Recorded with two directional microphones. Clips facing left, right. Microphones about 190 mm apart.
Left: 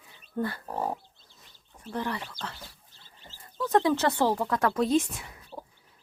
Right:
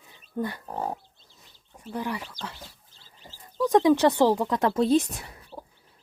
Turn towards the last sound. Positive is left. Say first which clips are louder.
# right 3 dB
turn(degrees=-35)  # may be behind; listen again after turning